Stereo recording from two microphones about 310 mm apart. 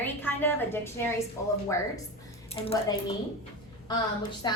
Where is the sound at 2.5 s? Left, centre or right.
Centre.